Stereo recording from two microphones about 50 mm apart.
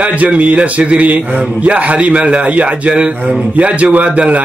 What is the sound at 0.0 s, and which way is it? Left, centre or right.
A man's voice, right.